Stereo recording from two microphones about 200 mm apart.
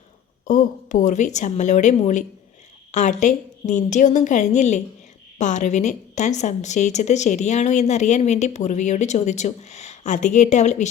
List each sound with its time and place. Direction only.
0.4 s a woman's voice: 40° left (ahead or behind)